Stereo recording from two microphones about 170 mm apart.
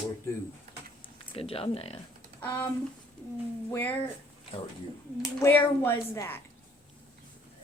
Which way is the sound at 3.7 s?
10° left (ahead or behind).